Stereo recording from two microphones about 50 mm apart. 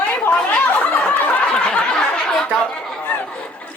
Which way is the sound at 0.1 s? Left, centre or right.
Left.